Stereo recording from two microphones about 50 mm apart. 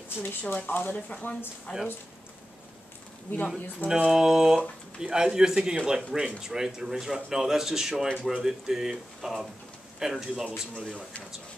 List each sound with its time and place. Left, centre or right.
0.2 s speech: left
3.3 s speech: left
3.8 s speech: centre
8.1 s speech: right
8.4 s speech: centre